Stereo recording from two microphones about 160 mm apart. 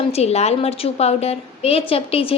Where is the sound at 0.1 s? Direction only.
40° left (ahead or behind).